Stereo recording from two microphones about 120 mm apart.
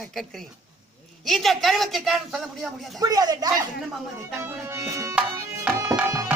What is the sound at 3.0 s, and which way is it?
Speech, 30° right (ahead or behind).